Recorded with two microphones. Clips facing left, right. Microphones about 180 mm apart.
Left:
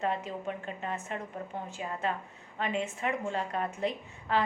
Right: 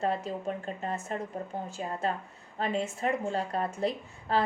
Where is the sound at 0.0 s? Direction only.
35° right (ahead or behind).